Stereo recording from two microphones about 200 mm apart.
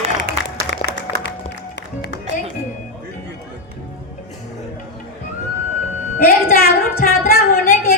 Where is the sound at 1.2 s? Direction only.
60° left (ahead or behind).